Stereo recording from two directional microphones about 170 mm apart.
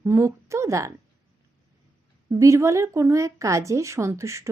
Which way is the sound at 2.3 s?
15° right (ahead or behind).